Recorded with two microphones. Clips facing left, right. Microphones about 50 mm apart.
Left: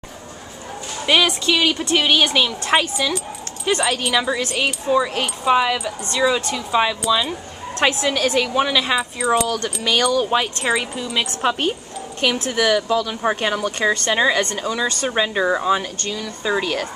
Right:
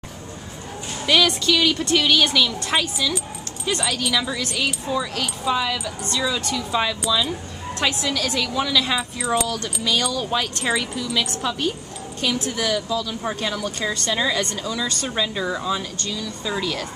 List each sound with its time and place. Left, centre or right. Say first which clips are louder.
1.0 s a woman's voice: left 1 dB; left
2.6 s a woman's voice: left 4 dB; left; by 7.0 s centre
7.8 s a woman's voice: left 5 dB; left
11.4 s speech: left 4 dB; left